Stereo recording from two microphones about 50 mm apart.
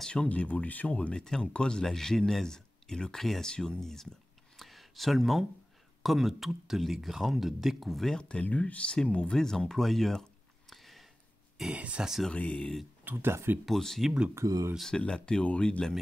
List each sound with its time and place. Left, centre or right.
0.1 s speech: left
1.9 s speech: centre
4.6 s a sound: centre
6.0 s speech: centre
8.1 s speech: centre
8.5 s speech: left; by 11.1 s centre
11.7 s speech: right
12.3 s speech: left
13.0 s speech: right
13.7 s speech: centre
14.3 s speech: right
14.9 s speech: centre